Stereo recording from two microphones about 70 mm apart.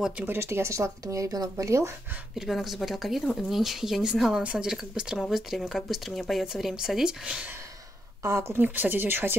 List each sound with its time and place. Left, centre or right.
0.3 s speech: right
2.3 s speech: centre
8.2 s speech: right